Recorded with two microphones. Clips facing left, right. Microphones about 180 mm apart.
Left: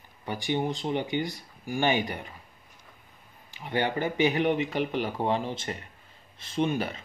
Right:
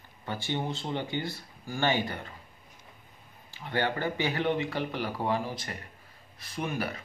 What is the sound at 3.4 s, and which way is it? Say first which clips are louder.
Speech: left 2 dB; 15° left (ahead or behind).